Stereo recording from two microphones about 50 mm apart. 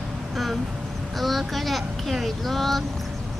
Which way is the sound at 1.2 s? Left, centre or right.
Centre.